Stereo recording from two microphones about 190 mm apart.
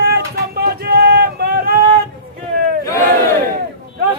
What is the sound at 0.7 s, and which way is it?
Music, 60° right (ahead or behind).